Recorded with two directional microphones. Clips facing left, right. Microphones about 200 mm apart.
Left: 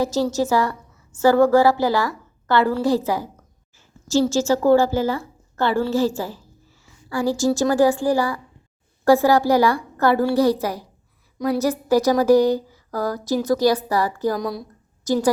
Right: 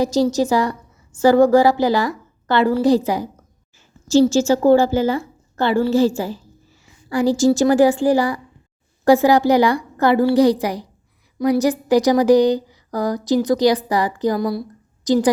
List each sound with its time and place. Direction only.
0.0 s a woman's voice: 15° right (ahead or behind)
6.8 s a sound: 20° right (ahead or behind)
7.6 s a woman's voice: 15° right (ahead or behind)
14.3 s speech: 5° right (ahead or behind)
15.0 s a woman's voice: 15° right (ahead or behind)